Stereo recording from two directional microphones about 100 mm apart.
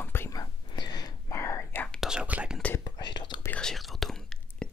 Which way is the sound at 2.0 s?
10° right (ahead or behind).